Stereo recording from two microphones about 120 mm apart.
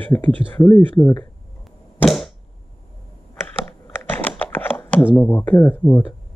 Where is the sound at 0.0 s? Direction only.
15° left (ahead or behind).